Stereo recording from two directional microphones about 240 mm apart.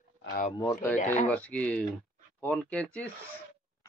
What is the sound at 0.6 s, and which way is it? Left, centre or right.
A child's voice, centre.